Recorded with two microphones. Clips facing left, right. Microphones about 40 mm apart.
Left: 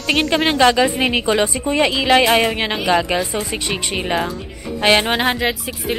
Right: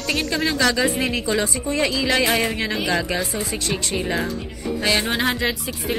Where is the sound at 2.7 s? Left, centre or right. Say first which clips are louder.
Left 6 dB; left.